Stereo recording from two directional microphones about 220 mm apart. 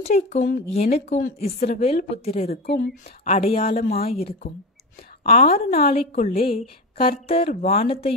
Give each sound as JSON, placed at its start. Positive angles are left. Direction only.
{"t": 0.1, "sound": "a woman's voice", "side_deg": 35}
{"t": 1.8, "sound": "a woman's voice", "side_deg": 30}
{"t": 2.5, "sound": "speech", "side_deg": 45}
{"t": 3.3, "sound": "a woman's voice", "side_deg": 25}
{"t": 6.2, "sound": "a woman's voice", "side_deg": 40}
{"t": 7.0, "sound": "a woman's voice", "side_deg": 25}